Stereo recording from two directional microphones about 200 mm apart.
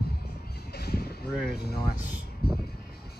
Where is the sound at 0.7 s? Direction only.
50° left (ahead or behind).